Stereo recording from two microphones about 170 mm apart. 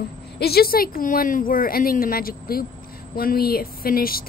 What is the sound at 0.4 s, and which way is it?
A woman's voice, 65° left (ahead or behind).